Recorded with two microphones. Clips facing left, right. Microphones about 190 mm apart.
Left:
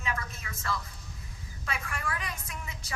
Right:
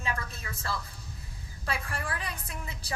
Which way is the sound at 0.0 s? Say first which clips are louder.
Right 1 dB; 35° right (ahead or behind).